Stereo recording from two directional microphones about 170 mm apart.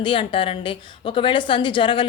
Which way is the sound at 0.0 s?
30° left (ahead or behind).